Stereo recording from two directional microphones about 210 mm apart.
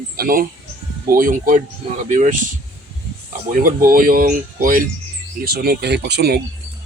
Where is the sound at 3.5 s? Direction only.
40° right (ahead or behind).